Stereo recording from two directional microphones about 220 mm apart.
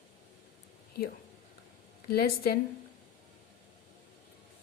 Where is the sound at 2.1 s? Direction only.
45° left (ahead or behind).